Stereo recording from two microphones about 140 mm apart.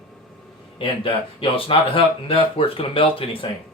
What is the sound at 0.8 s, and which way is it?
Speech, 40° left (ahead or behind).